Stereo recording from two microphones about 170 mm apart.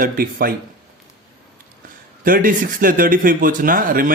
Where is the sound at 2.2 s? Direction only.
55° right (ahead or behind).